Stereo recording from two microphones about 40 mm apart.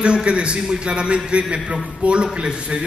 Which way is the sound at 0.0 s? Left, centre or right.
Right.